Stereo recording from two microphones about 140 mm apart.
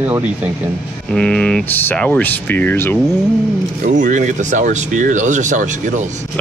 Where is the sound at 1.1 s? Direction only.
5° left (ahead or behind).